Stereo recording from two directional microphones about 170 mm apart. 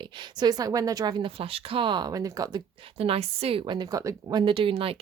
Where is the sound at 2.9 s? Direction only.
35° right (ahead or behind).